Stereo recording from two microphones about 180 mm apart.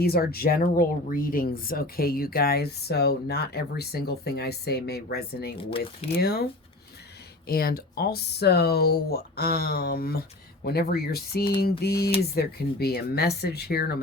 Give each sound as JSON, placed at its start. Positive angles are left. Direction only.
{"t": 0.0, "sound": "speech", "side_deg": 60}